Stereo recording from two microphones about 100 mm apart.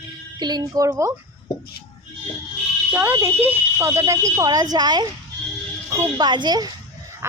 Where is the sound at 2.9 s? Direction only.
20° right (ahead or behind); by 5.1 s 45° right (ahead or behind).